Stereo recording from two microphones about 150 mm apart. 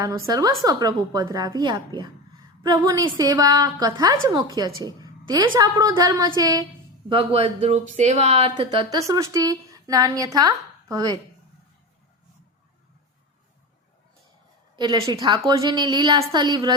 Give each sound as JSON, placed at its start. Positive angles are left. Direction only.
{"t": 0.0, "sound": "speech", "side_deg": -25}
{"t": 4.8, "sound": "a sound", "side_deg": -25}
{"t": 5.5, "sound": "speech", "side_deg": -25}
{"t": 7.1, "sound": "speech", "side_deg": -40}
{"t": 9.0, "sound": "speech", "side_deg": -20}
{"t": 14.8, "sound": "speech", "side_deg": -25}